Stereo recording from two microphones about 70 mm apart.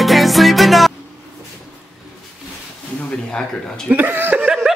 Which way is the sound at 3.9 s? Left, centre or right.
Right.